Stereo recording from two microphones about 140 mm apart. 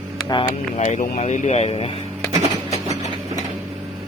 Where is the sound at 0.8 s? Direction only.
55° left (ahead or behind); by 2.0 s 40° left (ahead or behind).